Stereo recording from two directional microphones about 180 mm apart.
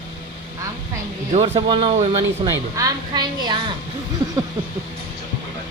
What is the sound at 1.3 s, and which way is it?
A woman's voice, 35° right (ahead or behind).